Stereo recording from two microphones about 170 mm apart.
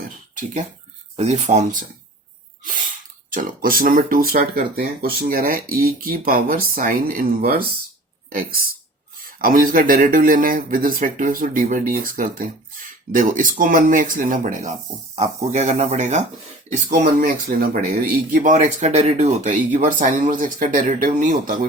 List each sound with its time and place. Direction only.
1.1 s speech: 40° right (ahead or behind)
3.3 s speech: 55° right (ahead or behind)